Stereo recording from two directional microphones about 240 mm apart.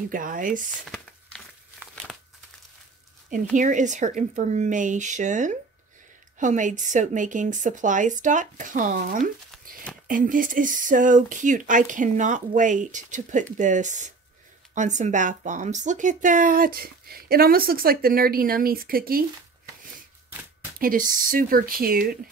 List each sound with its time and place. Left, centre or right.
0.1 s speech: right
0.9 s crumpling: centre
3.5 s speech: right
20.8 s speech: right